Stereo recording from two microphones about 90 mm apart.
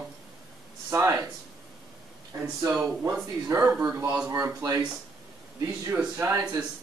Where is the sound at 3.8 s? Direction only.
35° right (ahead or behind).